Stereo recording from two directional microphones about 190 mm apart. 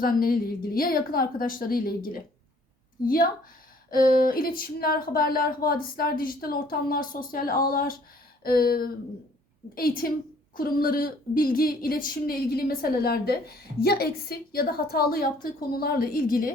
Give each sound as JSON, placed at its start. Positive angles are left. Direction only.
{"t": 0.0, "sound": "a woman's voice", "side_deg": 50}
{"t": 3.8, "sound": "a woman's voice", "side_deg": 50}